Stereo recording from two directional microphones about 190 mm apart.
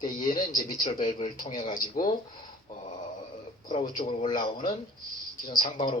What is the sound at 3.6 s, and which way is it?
A man's voice, 25° left (ahead or behind).